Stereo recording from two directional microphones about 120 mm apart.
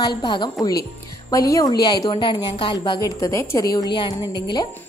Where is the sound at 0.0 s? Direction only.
40° left (ahead or behind).